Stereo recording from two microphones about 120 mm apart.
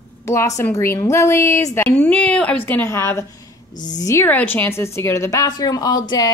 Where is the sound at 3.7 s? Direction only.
90° left.